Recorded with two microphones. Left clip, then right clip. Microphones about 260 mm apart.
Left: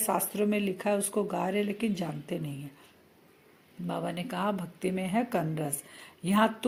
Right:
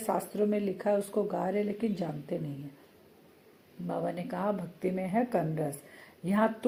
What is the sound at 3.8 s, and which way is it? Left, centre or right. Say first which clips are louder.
A woman's voice: even; left.